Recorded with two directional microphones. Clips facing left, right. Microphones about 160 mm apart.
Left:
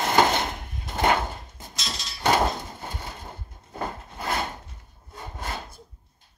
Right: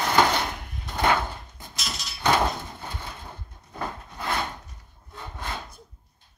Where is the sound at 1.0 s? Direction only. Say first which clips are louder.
Left 1 dB; 20° left (ahead or behind).